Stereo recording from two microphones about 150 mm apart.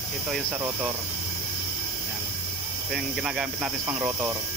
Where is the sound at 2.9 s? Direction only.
Centre (ahead or behind).